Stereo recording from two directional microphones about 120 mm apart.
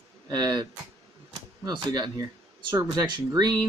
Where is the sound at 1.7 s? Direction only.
35° right (ahead or behind).